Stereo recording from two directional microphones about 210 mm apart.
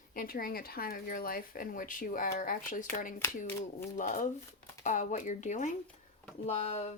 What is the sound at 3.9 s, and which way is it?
Speech, 35° left (ahead or behind).